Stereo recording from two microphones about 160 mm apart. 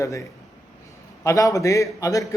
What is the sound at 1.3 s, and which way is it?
Speech, 20° left (ahead or behind).